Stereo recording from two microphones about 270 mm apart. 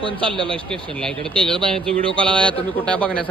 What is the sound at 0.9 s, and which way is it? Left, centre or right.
A man's voice, centre.